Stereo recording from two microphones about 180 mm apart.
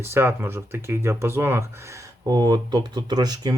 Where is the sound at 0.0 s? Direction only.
15° right (ahead or behind).